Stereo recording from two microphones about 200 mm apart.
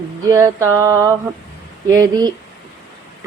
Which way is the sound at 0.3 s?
15° right (ahead or behind).